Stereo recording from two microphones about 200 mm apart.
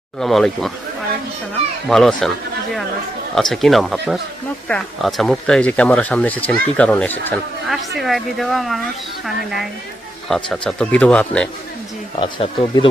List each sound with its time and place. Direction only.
0.2 s speech: centre (ahead or behind)
1.9 s speech: centre (ahead or behind)
3.3 s speech: centre (ahead or behind)
12.2 s speech: 25° left (ahead or behind)